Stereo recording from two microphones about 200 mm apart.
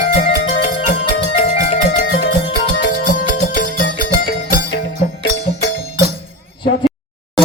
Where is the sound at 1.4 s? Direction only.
30° left (ahead or behind).